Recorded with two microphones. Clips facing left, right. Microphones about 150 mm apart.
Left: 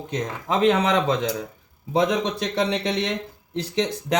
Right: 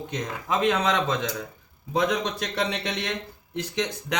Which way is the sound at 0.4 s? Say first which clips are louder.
Left 4 dB; 30° left (ahead or behind).